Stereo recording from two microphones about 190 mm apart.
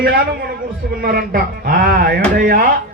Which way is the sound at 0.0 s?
50° right (ahead or behind).